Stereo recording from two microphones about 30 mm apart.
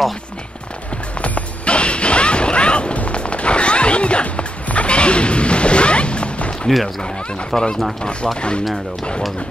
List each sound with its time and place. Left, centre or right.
1.7 s smash: left
3.1 s music: left
7.5 s speech: centre
8.0 s speech: left